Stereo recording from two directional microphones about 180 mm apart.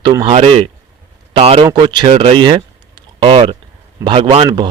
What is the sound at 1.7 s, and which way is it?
A man's voice, 25° right (ahead or behind).